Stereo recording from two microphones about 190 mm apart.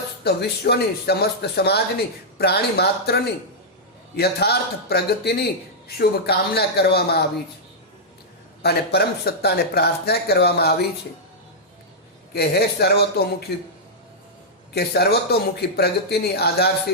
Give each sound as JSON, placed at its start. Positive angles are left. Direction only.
{"t": 0.3, "sound": "speech", "side_deg": 60}
{"t": 4.2, "sound": "speech", "side_deg": 55}
{"t": 8.6, "sound": "speech", "side_deg": 55}
{"t": 12.3, "sound": "speech", "side_deg": 60}
{"t": 14.7, "sound": "speech", "side_deg": 55}